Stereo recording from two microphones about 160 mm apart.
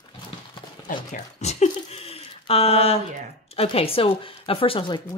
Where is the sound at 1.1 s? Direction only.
45° left (ahead or behind).